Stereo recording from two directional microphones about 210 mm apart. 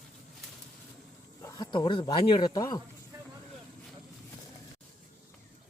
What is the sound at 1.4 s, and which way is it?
Speech, 20° left (ahead or behind).